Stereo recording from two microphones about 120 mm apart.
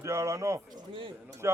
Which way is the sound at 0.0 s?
25° right (ahead or behind).